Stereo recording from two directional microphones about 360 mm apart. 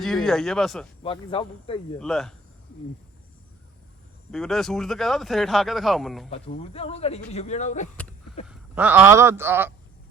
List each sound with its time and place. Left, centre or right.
0.0 s speech: centre
1.0 s speech: centre
2.0 s speech: centre
4.3 s speech: centre
6.3 s speech: centre
8.4 s speech: centre